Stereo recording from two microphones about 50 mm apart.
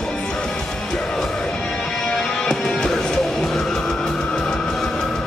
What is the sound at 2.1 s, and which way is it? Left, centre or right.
Music, centre.